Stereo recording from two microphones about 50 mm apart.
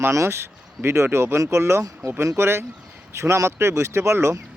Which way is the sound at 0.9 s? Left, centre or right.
Right.